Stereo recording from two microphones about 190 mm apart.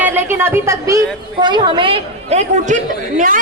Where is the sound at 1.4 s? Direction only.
25° right (ahead or behind).